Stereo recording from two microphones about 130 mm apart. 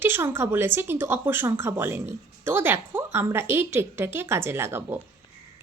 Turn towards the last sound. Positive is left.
turn(degrees=-20)  # may be behind; listen again after turning